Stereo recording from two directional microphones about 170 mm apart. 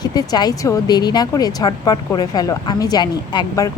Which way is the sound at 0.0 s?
20° left (ahead or behind).